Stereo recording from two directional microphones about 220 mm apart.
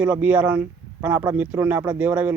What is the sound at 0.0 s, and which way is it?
Speech, 5° right (ahead or behind).